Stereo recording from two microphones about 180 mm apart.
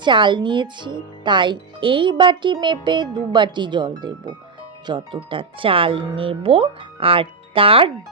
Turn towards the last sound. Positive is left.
turn(degrees=-30)  # may be behind; listen again after turning